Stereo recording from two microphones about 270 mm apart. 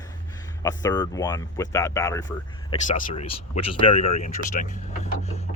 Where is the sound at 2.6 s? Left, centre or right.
Left.